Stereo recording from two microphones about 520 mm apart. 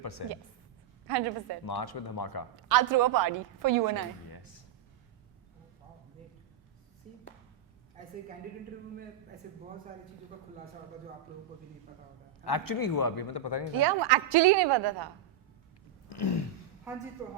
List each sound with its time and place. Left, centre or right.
0.0 s a woman's voice: left
1.1 s a woman's voice: right
1.6 s speech: left
2.6 s a woman's voice: right
12.5 s speech: left
13.7 s a woman's voice: right
16.0 s a sound: left